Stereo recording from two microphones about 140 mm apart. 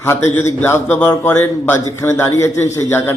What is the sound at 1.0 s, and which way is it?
A man's voice, 30° left (ahead or behind).